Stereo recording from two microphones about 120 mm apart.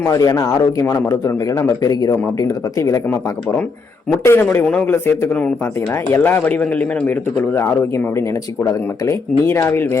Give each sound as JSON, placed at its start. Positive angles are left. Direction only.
{"t": 0.0, "sound": "a man's voice", "side_deg": 30}